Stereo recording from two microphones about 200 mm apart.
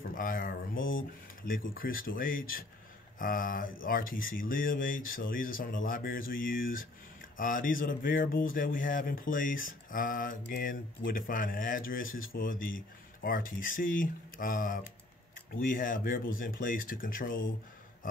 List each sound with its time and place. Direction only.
0.0 s speech: 45° left (ahead or behind)